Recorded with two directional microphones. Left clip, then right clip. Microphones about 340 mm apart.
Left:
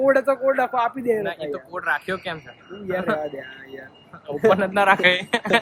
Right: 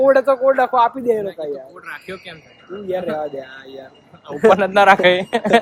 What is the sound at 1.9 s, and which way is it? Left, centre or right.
Speech, centre.